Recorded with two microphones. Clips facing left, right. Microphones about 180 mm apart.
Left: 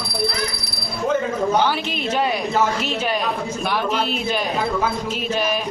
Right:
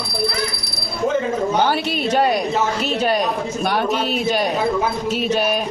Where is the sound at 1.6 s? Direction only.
45° right (ahead or behind).